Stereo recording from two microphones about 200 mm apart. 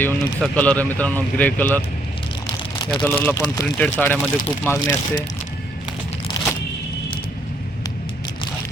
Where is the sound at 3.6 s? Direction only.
5° left (ahead or behind).